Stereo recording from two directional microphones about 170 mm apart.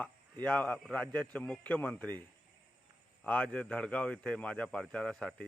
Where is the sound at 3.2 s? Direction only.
10° left (ahead or behind).